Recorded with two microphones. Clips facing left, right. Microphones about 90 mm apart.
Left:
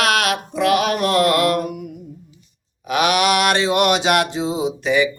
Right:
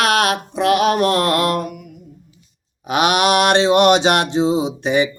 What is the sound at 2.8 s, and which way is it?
Mantra, 20° right (ahead or behind).